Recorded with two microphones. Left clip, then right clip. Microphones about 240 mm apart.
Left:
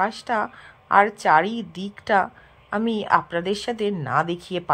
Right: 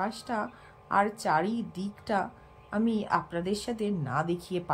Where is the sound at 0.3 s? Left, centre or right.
Centre.